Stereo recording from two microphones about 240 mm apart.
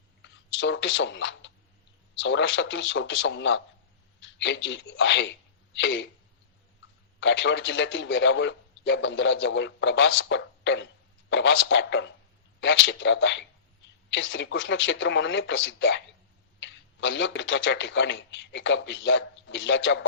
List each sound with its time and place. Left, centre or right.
0.2 s a man's voice: left
7.2 s a man's voice: left